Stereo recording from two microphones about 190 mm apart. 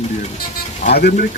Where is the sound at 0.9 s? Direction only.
55° left (ahead or behind).